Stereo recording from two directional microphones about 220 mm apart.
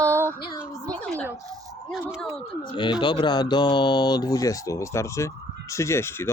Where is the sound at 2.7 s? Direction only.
20° left (ahead or behind).